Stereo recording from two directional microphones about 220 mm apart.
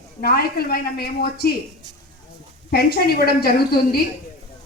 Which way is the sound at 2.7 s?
45° left (ahead or behind).